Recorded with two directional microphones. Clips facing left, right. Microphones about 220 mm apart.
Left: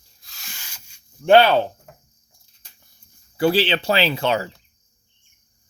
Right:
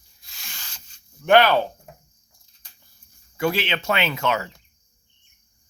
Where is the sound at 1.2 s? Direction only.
30° left (ahead or behind).